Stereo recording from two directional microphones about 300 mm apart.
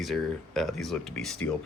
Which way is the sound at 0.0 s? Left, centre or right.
Centre.